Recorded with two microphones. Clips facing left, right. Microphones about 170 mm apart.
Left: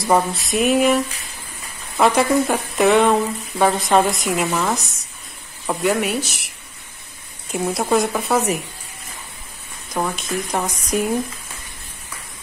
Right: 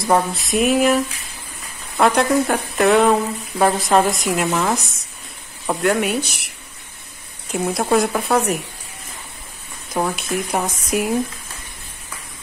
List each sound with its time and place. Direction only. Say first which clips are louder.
0.0 s speech: even; centre (ahead or behind)
5.7 s speech: right 1 dB; centre (ahead or behind)
7.5 s speech: right 1 dB; centre (ahead or behind)
9.9 s speech: right 2 dB; 10° right (ahead or behind)